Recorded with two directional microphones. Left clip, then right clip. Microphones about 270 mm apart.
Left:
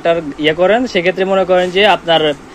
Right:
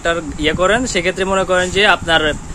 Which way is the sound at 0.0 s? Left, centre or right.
Centre.